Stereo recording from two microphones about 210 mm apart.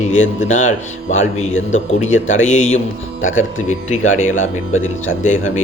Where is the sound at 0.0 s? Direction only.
35° left (ahead or behind).